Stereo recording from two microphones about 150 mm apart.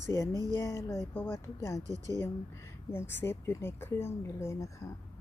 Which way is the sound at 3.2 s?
15° left (ahead or behind).